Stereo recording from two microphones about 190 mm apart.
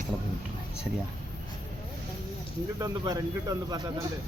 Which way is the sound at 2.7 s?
20° right (ahead or behind).